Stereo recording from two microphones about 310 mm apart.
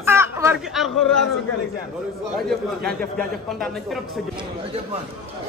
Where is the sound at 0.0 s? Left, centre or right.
Centre.